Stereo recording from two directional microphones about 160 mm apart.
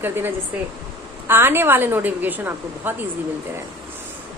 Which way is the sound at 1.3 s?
15° right (ahead or behind).